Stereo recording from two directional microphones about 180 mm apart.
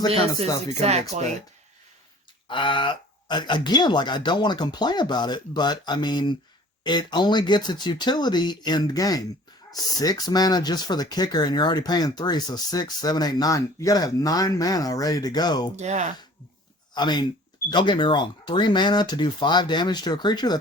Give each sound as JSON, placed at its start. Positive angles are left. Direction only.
{"t": 0.8, "sound": "speech", "side_deg": -35}
{"t": 2.5, "sound": "speech", "side_deg": 25}
{"t": 15.7, "sound": "speech", "side_deg": -40}
{"t": 16.9, "sound": "speech", "side_deg": 25}